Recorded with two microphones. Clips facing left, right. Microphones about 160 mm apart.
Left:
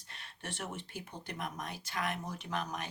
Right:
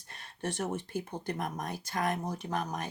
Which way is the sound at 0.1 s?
40° right (ahead or behind).